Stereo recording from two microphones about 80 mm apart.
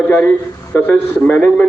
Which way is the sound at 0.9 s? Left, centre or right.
Centre.